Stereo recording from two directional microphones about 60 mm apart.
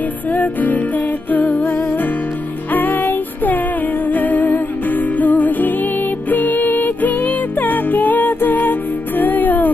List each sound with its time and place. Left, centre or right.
0.3 s music: left